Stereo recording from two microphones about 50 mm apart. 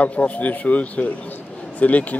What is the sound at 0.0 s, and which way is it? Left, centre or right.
A man's voice, left.